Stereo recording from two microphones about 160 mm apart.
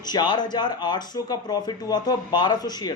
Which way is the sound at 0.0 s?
25° left (ahead or behind).